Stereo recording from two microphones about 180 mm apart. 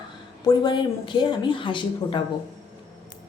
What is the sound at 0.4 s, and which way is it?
A woman's voice, 25° left (ahead or behind).